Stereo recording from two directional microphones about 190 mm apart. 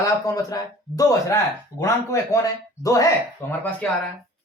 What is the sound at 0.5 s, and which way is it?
Speech, 20° left (ahead or behind).